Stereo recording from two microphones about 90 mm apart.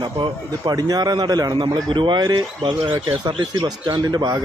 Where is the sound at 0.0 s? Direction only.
75° right (ahead or behind).